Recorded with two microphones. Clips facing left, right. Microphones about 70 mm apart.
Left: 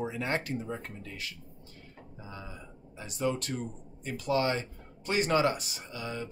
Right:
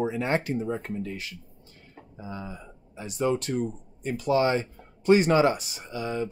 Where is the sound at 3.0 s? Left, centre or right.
Right.